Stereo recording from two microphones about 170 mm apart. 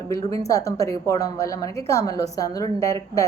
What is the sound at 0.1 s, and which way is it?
A woman's voice, 20° left (ahead or behind).